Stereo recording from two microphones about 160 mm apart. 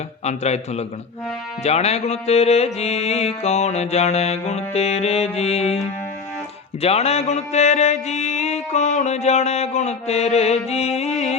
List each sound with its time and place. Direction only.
0.3 s mantra: 45° left (ahead or behind)
1.6 s music: 40° left (ahead or behind)
6.8 s mantra: 40° left (ahead or behind)